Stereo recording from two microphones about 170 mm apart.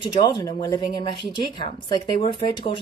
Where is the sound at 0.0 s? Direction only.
25° left (ahead or behind).